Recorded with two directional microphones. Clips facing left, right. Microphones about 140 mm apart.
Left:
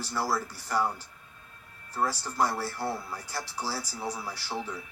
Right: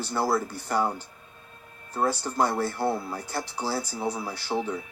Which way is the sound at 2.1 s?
20° right (ahead or behind).